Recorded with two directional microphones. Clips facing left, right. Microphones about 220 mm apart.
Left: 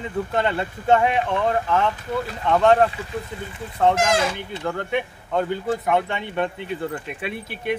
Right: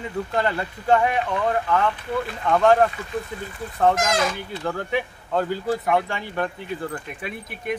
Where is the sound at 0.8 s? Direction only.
25° left (ahead or behind).